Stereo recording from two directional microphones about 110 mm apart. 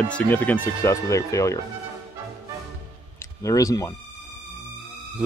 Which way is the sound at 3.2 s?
30° left (ahead or behind).